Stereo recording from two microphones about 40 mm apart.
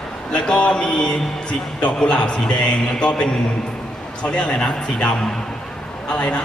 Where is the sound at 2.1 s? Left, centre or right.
Left.